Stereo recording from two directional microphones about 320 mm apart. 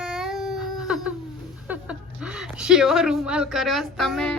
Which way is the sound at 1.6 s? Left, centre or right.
Centre.